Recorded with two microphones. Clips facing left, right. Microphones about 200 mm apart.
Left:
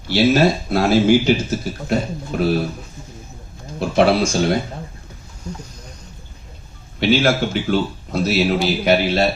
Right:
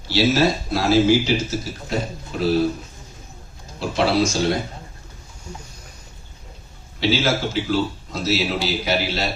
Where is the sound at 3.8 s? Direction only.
55° left (ahead or behind).